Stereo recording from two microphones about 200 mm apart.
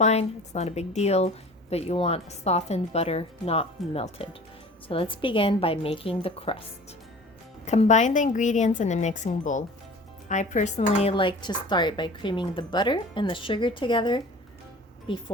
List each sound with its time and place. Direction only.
0.0 s a woman's voice: 35° left (ahead or behind)
7.6 s a woman's voice: 35° left (ahead or behind)